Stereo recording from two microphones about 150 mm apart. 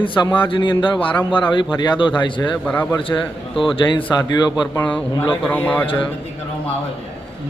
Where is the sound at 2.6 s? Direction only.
10° left (ahead or behind).